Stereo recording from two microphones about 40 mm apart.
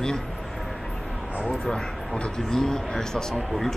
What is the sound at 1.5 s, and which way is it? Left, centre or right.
A man's voice, left.